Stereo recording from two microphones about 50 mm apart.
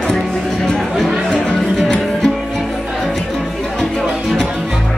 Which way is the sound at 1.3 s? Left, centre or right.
Centre.